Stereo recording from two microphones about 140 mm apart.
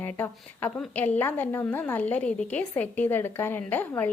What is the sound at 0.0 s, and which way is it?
A woman's voice, 10° left (ahead or behind).